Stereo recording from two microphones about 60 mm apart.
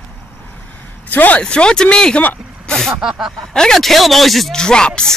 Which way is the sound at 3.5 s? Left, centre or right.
Centre.